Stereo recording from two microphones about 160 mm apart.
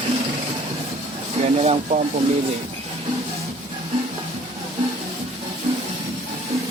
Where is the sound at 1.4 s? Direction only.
40° right (ahead or behind).